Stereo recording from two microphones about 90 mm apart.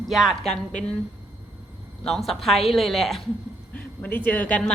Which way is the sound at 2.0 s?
Centre (ahead or behind).